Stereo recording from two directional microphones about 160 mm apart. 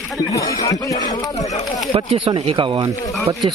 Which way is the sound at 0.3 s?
20° left (ahead or behind).